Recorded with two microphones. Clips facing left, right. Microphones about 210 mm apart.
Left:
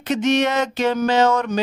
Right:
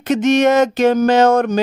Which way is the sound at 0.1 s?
45° right (ahead or behind).